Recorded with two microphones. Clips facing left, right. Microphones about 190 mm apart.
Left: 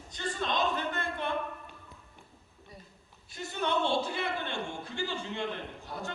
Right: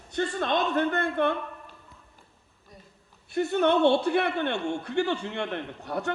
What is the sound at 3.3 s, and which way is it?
A man's voice, 60° right (ahead or behind).